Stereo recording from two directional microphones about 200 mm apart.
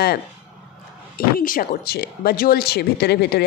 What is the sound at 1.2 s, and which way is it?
Speech, 45° left (ahead or behind).